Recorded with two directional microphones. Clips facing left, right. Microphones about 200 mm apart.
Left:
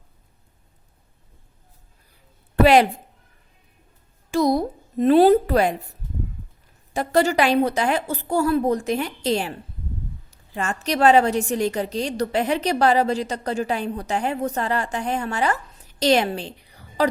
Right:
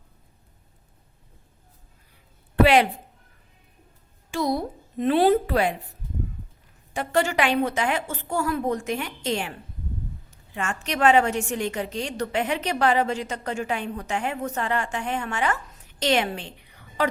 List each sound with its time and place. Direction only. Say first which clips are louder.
2.6 s a sound: left 3 dB; 40° left (ahead or behind)
4.3 s a woman's voice: left 6 dB; 40° left (ahead or behind)
6.9 s a woman's voice: left 4 dB; 40° left (ahead or behind)